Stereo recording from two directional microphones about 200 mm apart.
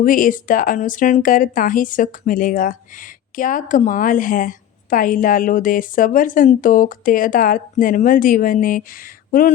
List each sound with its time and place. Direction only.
0.0 s a woman's voice: 40° left (ahead or behind)